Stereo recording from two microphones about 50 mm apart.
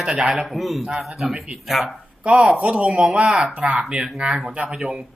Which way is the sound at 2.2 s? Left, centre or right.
Right.